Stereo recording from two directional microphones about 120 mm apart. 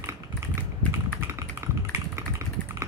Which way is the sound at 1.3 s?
20° right (ahead or behind).